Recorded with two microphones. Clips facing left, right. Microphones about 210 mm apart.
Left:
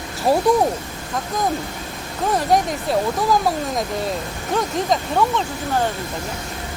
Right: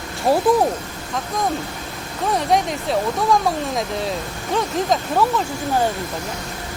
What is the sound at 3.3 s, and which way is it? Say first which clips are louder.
Speech: even; centre (ahead or behind).